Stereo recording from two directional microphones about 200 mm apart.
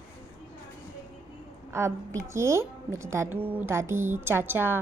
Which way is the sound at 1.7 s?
15° right (ahead or behind).